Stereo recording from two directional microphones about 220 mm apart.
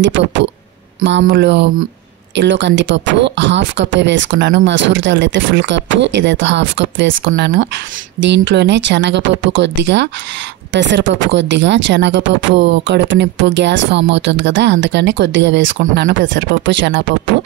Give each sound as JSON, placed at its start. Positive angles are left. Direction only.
{"t": 0.0, "sound": "speech", "side_deg": -55}